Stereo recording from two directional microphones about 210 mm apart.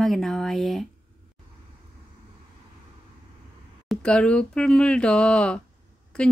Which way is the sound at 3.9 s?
5° left (ahead or behind).